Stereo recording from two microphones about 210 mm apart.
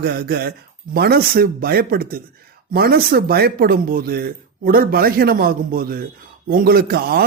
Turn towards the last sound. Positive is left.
turn(degrees=-45)  # may be behind; listen again after turning